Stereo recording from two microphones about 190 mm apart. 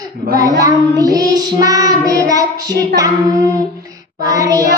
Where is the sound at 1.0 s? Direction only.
20° right (ahead or behind).